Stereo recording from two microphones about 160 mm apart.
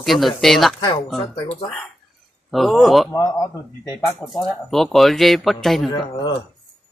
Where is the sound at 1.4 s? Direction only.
40° left (ahead or behind).